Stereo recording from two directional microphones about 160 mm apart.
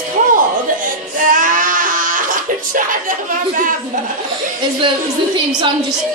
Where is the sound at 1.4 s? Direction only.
55° right (ahead or behind).